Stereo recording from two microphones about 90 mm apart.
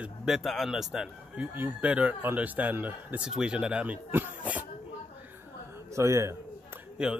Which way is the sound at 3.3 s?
10° right (ahead or behind).